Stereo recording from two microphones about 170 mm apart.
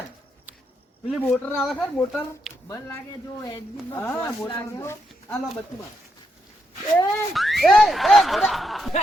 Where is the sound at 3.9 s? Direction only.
15° left (ahead or behind).